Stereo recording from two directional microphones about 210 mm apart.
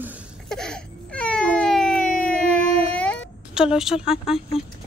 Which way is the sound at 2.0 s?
40° left (ahead or behind).